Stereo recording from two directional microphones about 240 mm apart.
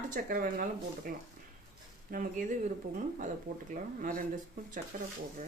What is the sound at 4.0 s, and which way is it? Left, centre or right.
Speech, right.